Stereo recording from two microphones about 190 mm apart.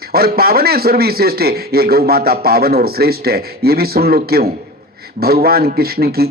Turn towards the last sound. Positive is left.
turn(degrees=-55)  # may be behind; listen again after turning